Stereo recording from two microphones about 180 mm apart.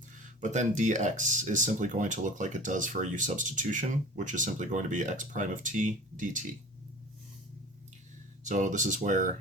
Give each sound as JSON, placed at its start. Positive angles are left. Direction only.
{"t": 0.2, "sound": "speech", "side_deg": -45}
{"t": 8.4, "sound": "speech", "side_deg": -45}